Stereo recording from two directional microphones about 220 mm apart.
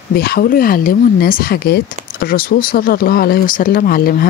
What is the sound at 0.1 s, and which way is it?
Speech, 45° left (ahead or behind).